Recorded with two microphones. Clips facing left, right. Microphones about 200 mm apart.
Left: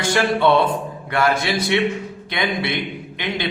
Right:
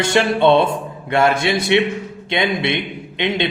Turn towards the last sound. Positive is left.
turn(degrees=-25)  # may be behind; listen again after turning